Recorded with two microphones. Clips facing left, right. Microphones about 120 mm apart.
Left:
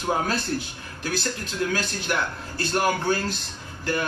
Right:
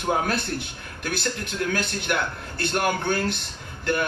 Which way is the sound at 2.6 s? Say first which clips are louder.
Left 1 dB; 60° right (ahead or behind).